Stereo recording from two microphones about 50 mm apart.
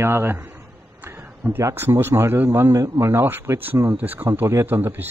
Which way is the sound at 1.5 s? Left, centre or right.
Right.